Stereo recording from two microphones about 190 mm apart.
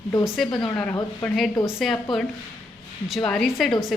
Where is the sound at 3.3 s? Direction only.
Centre (ahead or behind).